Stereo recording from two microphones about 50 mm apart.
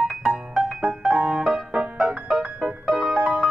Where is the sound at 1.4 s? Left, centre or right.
Centre.